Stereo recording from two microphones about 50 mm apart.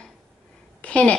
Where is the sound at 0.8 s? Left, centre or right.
Left.